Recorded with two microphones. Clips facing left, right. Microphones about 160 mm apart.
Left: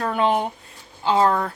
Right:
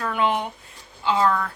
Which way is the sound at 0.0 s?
35° left (ahead or behind).